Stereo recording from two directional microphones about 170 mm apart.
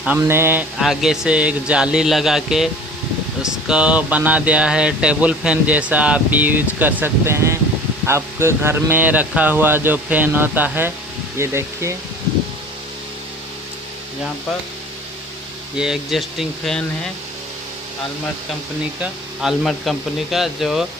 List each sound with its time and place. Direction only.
0.0 s speech: 10° right (ahead or behind)
0.7 s speech: centre (ahead or behind)
15.8 s speech: centre (ahead or behind)
18.9 s speech: centre (ahead or behind)